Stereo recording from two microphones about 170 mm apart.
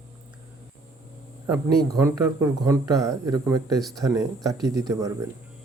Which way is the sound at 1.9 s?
15° right (ahead or behind).